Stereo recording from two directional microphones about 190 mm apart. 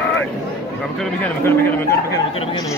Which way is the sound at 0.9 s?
10° left (ahead or behind).